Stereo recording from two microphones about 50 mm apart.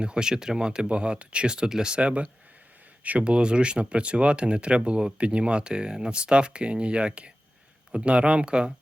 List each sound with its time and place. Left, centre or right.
0.0 s speech: centre